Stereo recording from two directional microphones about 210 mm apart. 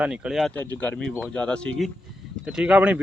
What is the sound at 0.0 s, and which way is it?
Speech, 5° right (ahead or behind).